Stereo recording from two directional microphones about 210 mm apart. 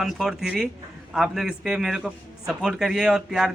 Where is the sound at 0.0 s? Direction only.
Centre (ahead or behind).